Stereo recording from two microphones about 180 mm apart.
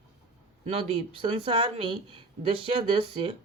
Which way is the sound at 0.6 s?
35° right (ahead or behind).